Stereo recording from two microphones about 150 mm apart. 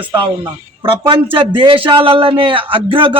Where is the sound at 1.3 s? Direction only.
35° right (ahead or behind).